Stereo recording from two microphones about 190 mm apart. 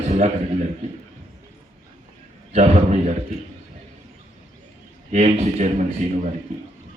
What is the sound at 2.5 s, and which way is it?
Speech, 35° right (ahead or behind).